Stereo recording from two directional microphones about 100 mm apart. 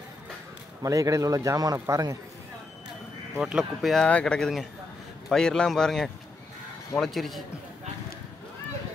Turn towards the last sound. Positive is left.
turn(degrees=0)  # may be behind; listen again after turning